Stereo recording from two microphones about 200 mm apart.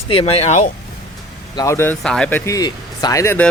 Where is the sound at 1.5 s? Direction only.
15° left (ahead or behind).